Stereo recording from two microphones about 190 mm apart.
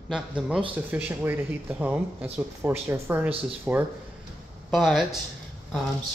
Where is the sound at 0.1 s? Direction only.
5° right (ahead or behind).